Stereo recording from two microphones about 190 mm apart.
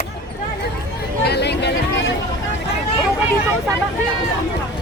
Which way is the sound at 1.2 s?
60° left (ahead or behind).